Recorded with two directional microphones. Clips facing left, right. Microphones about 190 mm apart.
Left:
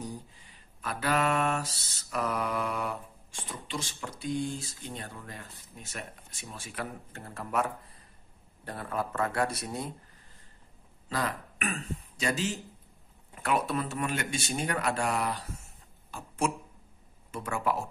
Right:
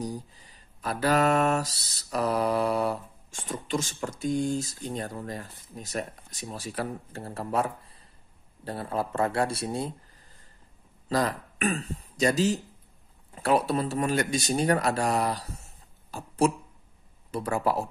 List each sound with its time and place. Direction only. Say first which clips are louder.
0.0 s mantra: right 6 dB; 35° right (ahead or behind)
8.6 s speech: right 4 dB; 30° right (ahead or behind)
11.1 s speech: right 6 dB; 40° right (ahead or behind)
13.3 s mantra: right 5 dB; 35° right (ahead or behind)
16.1 s speech: right 6 dB; 35° right (ahead or behind)
17.3 s mantra: right 4 dB; 35° right (ahead or behind)